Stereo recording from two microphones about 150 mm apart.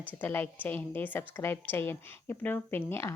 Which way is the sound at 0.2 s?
10° left (ahead or behind).